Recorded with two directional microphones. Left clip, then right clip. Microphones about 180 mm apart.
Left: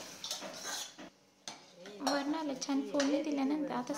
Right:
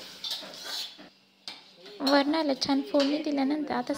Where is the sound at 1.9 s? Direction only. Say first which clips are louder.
Right 10 dB; 35° right (ahead or behind).